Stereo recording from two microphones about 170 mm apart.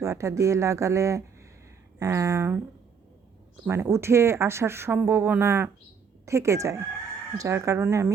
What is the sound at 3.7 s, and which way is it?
A woman's voice, 15° right (ahead or behind).